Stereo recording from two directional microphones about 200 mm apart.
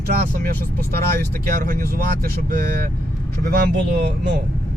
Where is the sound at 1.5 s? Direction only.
45° right (ahead or behind).